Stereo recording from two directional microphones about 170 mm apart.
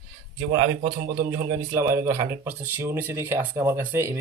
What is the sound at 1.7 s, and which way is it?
Speech, 15° right (ahead or behind).